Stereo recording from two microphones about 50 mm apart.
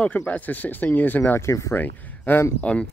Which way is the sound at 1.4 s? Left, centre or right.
Left.